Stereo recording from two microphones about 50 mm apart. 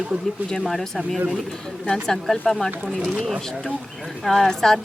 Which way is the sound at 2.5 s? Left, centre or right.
Centre.